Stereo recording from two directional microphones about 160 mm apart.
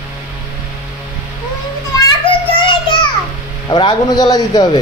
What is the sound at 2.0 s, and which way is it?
Children playing, 30° left (ahead or behind).